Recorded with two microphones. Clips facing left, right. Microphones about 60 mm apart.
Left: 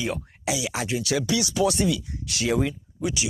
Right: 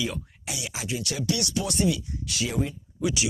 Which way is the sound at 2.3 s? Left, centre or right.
Left.